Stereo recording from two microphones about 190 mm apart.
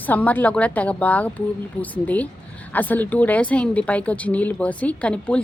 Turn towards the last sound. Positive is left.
turn(degrees=5)  # may be behind; listen again after turning